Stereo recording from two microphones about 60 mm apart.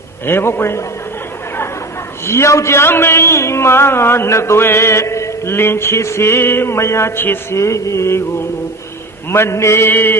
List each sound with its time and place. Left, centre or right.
0.3 s speech: left
2.2 s speech: left
4.3 s speech: left
4.6 s chant: left
5.5 s speech: left
9.3 s speech: left